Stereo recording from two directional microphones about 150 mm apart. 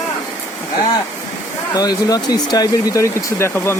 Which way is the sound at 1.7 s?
25° left (ahead or behind).